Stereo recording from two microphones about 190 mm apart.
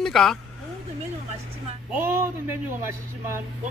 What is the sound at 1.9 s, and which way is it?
Speech, 10° right (ahead or behind).